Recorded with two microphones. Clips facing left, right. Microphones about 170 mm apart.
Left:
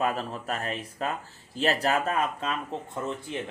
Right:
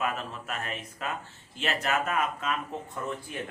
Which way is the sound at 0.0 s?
35° left (ahead or behind).